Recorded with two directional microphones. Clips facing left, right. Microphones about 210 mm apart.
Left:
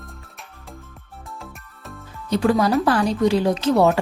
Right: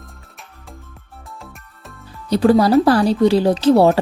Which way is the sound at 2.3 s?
35° right (ahead or behind).